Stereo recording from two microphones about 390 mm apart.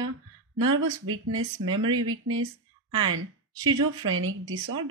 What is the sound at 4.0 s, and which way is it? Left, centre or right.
Speech, right.